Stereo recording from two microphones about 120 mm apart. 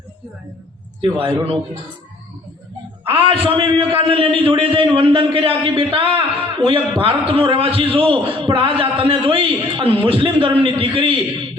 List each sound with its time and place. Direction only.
1.0 s a man's voice: 45° right (ahead or behind)
3.0 s a man's voice: 50° right (ahead or behind)